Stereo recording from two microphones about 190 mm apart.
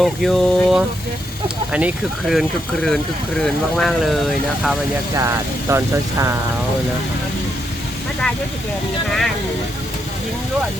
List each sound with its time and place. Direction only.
0.0 s speech: centre (ahead or behind)
5.1 s speech: 15° right (ahead or behind)
9.0 s speech: centre (ahead or behind)